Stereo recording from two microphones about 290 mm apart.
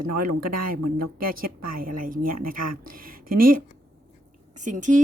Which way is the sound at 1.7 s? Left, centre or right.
Right.